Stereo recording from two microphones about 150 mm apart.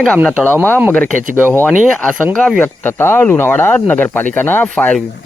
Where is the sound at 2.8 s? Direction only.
15° left (ahead or behind).